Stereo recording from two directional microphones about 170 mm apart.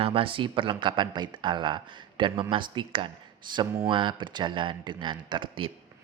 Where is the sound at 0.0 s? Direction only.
30° right (ahead or behind).